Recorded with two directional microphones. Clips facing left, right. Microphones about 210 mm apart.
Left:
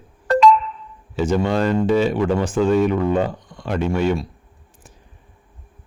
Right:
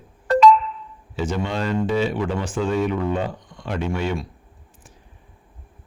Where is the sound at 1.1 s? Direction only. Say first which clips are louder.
Left 6 dB; 45° left (ahead or behind).